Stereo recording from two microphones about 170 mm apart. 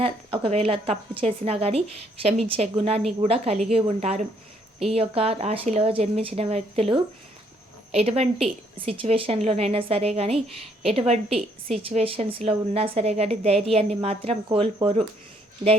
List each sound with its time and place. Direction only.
0.0 s a woman's voice: 35° right (ahead or behind)